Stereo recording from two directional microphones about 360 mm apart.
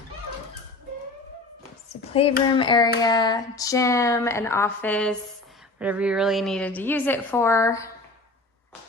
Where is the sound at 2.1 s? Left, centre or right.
Centre.